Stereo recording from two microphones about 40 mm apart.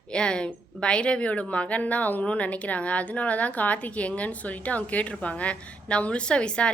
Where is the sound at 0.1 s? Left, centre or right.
Left.